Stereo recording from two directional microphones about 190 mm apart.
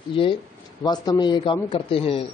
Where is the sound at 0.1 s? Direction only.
25° left (ahead or behind).